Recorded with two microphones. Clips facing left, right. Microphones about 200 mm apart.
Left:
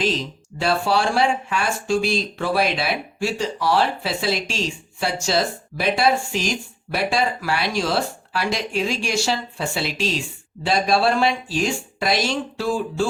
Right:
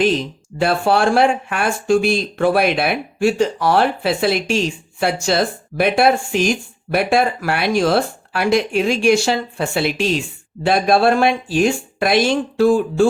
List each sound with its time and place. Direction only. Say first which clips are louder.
0.6 s speech: right 5 dB; 55° right (ahead or behind)